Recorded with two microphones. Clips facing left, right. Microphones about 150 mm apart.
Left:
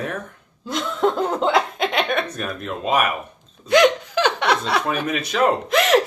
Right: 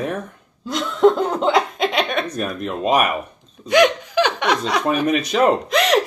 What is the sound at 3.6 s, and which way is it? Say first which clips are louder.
Speech: even; 15° right (ahead or behind).